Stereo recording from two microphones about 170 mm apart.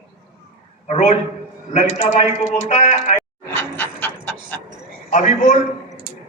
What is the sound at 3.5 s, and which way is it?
Pant, 15° left (ahead or behind).